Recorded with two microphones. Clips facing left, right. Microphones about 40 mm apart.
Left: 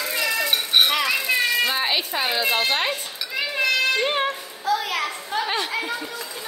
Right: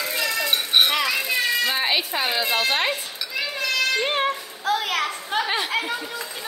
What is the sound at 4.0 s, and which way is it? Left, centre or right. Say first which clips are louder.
Music: even; centre.